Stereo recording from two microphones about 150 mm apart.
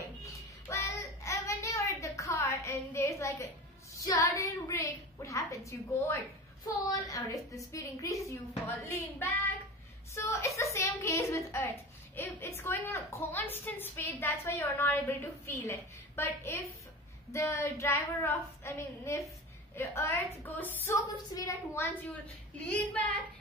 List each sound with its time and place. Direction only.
0.2 s a sound: 20° left (ahead or behind)
4.0 s child singing: 25° left (ahead or behind)
4.6 s a sound: 20° left (ahead or behind)
6.9 s child singing: 20° left (ahead or behind)
8.8 s a woman's voice: 15° left (ahead or behind)
10.1 s child singing: 20° left (ahead or behind)
12.2 s a woman's voice: 15° left (ahead or behind)
17.3 s child singing: 20° left (ahead or behind)
19.7 s a woman's voice: 15° left (ahead or behind)
22.7 s a woman's voice: 10° left (ahead or behind)